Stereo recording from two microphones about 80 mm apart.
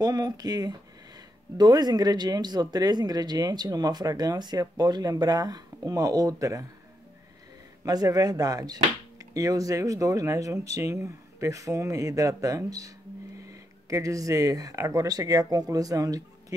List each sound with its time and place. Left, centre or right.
0.0 s speech: right
7.8 s speech: right